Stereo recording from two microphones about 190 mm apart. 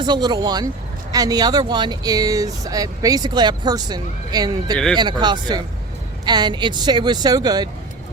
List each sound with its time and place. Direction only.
0.0 s speech: 20° right (ahead or behind)